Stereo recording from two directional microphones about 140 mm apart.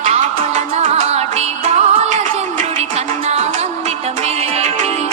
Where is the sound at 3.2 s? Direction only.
50° right (ahead or behind).